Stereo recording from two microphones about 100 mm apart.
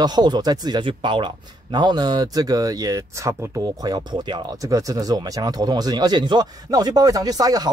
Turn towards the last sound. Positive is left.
turn(degrees=-40)  # may be behind; listen again after turning